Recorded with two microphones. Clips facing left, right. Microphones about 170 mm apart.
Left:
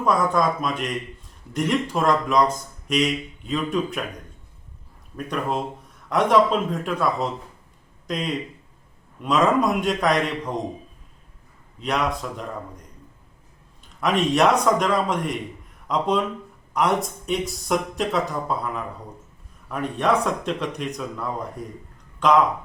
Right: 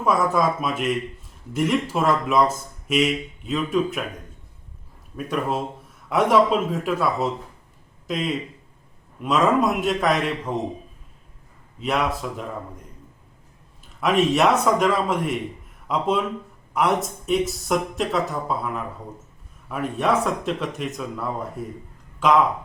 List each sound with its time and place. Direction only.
0.0 s speech: 5° right (ahead or behind)
5.1 s speech: 5° right (ahead or behind)
11.8 s speech: 5° right (ahead or behind)
14.0 s speech: 5° right (ahead or behind)